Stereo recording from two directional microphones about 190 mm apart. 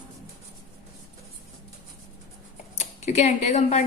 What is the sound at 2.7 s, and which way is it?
Speech, 35° left (ahead or behind).